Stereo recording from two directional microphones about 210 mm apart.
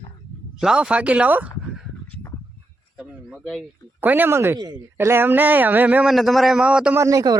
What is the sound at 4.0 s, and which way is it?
Speech, 10° right (ahead or behind).